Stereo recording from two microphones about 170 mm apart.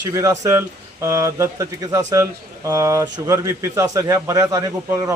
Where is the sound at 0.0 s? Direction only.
20° right (ahead or behind).